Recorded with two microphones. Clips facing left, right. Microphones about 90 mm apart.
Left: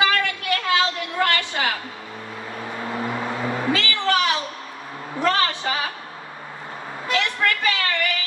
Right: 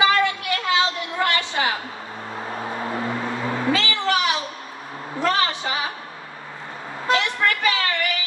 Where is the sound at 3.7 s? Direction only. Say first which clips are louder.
Even; 20° right (ahead or behind).